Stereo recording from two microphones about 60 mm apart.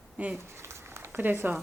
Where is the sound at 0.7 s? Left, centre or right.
Right.